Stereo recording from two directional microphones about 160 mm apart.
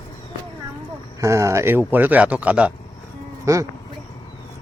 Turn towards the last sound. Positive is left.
turn(degrees=-20)  # may be behind; listen again after turning